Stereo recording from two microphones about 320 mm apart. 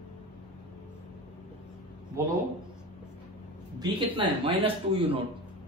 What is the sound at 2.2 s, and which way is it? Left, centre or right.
Speech, centre.